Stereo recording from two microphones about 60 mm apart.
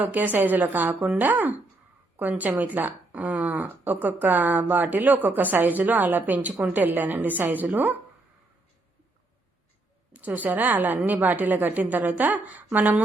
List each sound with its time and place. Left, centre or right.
0.0 s a woman's voice: right
10.1 s speech: right